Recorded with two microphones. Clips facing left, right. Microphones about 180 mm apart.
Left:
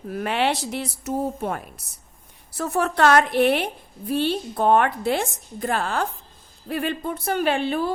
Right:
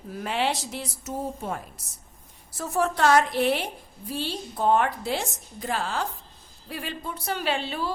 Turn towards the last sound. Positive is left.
turn(degrees=55)  # may be behind; listen again after turning